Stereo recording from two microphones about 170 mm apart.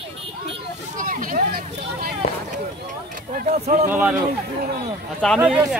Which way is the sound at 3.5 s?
40° right (ahead or behind).